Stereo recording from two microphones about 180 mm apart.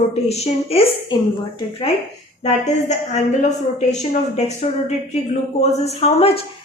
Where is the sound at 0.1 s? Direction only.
35° left (ahead or behind).